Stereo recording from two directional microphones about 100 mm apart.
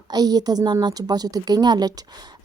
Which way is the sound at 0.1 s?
40° right (ahead or behind).